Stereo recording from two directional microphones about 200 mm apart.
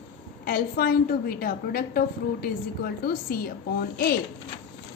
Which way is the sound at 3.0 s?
50° left (ahead or behind).